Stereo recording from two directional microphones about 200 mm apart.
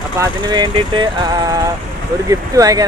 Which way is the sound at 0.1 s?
20° right (ahead or behind).